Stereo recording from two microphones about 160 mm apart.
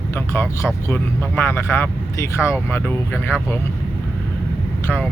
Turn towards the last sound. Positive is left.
turn(degrees=10)  # may be behind; listen again after turning